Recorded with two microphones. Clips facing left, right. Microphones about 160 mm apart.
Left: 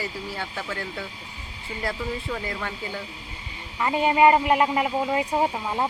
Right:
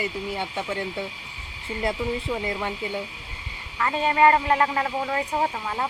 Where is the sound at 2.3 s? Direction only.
20° right (ahead or behind).